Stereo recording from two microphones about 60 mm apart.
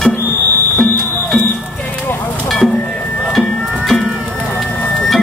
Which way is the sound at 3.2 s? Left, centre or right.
Centre.